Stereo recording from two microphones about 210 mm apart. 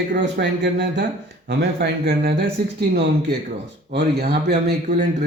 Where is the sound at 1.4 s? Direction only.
45° right (ahead or behind).